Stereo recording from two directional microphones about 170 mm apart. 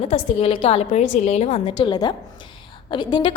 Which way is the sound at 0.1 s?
35° left (ahead or behind).